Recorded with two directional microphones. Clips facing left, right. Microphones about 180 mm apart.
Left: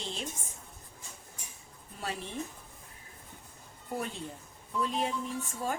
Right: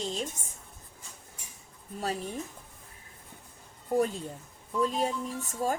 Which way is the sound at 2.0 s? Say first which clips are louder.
Right 5 dB; 40° right (ahead or behind).